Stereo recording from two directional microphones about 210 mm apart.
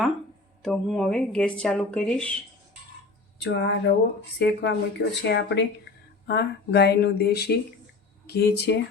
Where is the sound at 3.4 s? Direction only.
55° left (ahead or behind).